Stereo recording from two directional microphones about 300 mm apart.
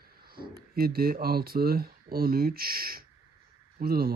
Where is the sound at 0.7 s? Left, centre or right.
Right.